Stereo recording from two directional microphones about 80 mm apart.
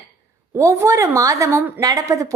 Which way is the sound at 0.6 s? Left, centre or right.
Right.